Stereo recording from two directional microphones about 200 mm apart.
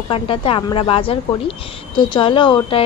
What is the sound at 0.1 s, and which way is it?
Speech, 25° left (ahead or behind).